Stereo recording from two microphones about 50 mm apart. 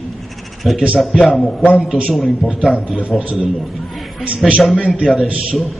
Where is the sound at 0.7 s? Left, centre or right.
Centre.